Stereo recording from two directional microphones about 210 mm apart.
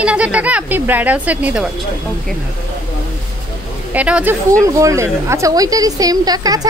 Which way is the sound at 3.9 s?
5° right (ahead or behind).